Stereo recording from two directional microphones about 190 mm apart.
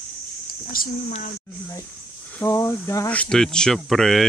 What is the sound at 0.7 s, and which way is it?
Speech, 50° left (ahead or behind).